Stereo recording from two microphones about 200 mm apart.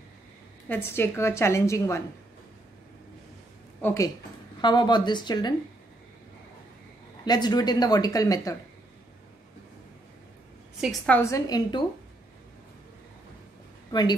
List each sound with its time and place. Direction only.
0.7 s a woman's voice: 10° left (ahead or behind)
3.8 s a woman's voice: 15° left (ahead or behind)
7.2 s speech: 20° left (ahead or behind)
10.8 s a woman's voice: centre (ahead or behind)
11.1 s a woman's voice: 15° left (ahead or behind)